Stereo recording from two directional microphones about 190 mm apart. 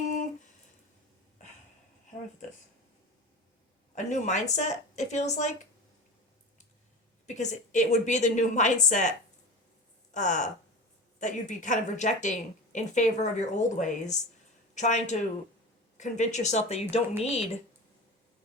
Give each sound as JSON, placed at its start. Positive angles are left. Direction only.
{"t": 3.9, "sound": "a woman's voice", "side_deg": 40}
{"t": 7.3, "sound": "a woman's voice", "side_deg": 40}